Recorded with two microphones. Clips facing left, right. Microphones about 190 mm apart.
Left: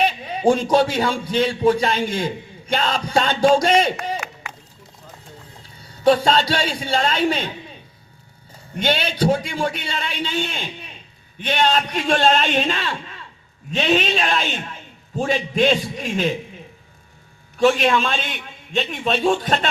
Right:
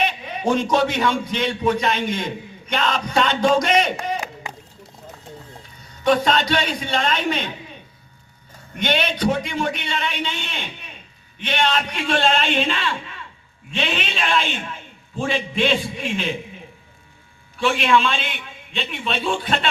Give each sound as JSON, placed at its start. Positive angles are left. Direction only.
{"t": 0.0, "sound": "a man's voice", "side_deg": 30}
{"t": 5.9, "sound": "a man's voice", "side_deg": 30}
{"t": 8.8, "sound": "a man's voice", "side_deg": 35}
{"t": 17.6, "sound": "a man's voice", "side_deg": 40}